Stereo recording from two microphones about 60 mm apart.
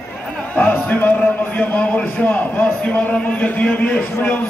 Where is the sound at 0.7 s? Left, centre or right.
Left.